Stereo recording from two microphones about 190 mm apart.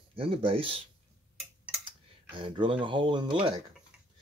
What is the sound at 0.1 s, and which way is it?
Speech, 30° right (ahead or behind).